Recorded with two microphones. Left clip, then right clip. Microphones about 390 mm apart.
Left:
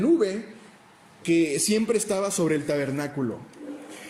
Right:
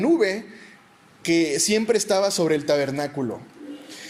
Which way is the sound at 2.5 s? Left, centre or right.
Right.